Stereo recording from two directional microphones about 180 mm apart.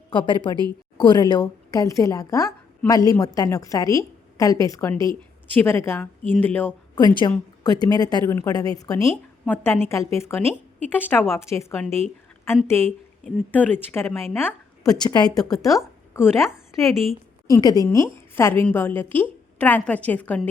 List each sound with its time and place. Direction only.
0.1 s a woman's voice: 25° left (ahead or behind); by 6.7 s 10° left (ahead or behind)
6.9 s a woman's voice: 25° left (ahead or behind)
11.9 s speech: 35° right (ahead or behind)
12.6 s a woman's voice: 15° left (ahead or behind)
15.0 s a woman's voice: 25° left (ahead or behind)
16.8 s a woman's voice: centre (ahead or behind)
17.5 s a woman's voice: 20° left (ahead or behind)